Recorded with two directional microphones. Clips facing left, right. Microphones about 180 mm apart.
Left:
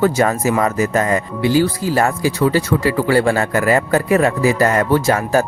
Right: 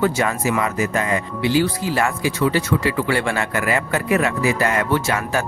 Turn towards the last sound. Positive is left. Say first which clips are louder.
# left 6 dB
turn(degrees=40)  # may be behind; listen again after turning